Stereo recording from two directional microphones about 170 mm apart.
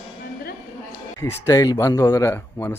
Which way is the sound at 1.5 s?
20° left (ahead or behind).